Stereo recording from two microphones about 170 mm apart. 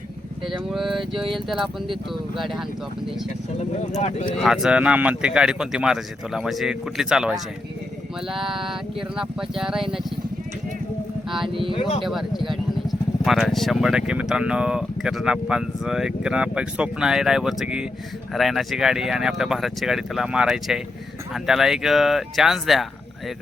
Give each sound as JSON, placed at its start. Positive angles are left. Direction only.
{"t": 0.7, "sound": "speech", "side_deg": 0}
{"t": 4.0, "sound": "speech", "side_deg": 40}
{"t": 4.4, "sound": "speech", "side_deg": -5}
{"t": 11.3, "sound": "speech", "side_deg": 0}
{"t": 11.7, "sound": "speech", "side_deg": 30}
{"t": 12.0, "sound": "speech", "side_deg": 0}